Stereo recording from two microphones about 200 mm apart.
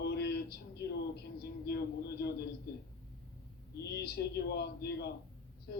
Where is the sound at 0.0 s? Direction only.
55° left (ahead or behind).